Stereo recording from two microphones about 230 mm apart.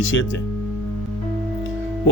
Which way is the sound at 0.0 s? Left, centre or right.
Left.